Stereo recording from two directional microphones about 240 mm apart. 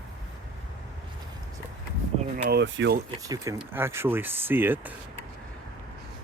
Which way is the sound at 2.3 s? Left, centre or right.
Right.